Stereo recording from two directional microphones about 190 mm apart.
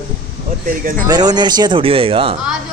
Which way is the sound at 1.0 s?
20° right (ahead or behind).